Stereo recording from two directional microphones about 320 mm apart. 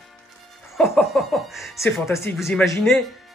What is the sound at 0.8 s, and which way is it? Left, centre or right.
A woman's voice, centre.